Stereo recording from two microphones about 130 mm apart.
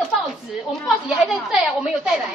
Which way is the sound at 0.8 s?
5° right (ahead or behind).